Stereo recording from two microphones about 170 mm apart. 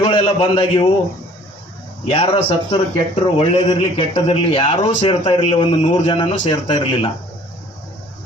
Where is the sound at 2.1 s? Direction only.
30° left (ahead or behind).